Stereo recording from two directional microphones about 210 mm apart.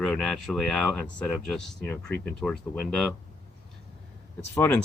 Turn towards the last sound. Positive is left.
turn(degrees=10)  # may be behind; listen again after turning